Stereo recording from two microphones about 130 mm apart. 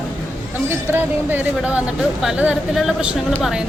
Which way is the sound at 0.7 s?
15° right (ahead or behind).